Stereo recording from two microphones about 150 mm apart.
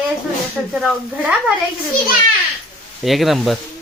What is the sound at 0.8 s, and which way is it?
Speech, 5° right (ahead or behind).